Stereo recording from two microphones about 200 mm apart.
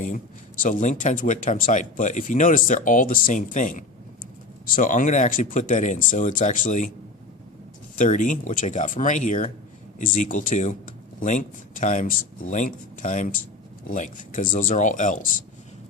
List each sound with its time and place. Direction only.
0.6 s speech: 40° left (ahead or behind)
7.9 s speech: 40° left (ahead or behind)